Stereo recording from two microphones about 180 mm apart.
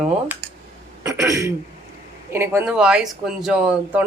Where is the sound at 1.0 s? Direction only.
20° right (ahead or behind).